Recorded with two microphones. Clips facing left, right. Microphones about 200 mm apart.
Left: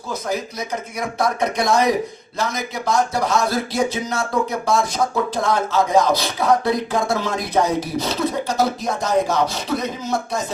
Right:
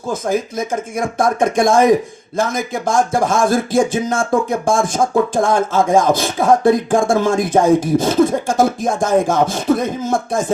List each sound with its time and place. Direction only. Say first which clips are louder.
0.9 s speech: right 5 dB; 50° right (ahead or behind)